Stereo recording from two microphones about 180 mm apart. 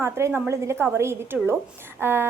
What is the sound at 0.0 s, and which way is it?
A woman's voice, 15° right (ahead or behind).